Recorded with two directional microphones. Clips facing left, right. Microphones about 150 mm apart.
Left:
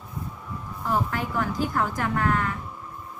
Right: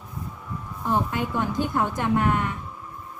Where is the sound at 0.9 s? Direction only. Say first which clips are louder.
Right 2 dB; 20° right (ahead or behind).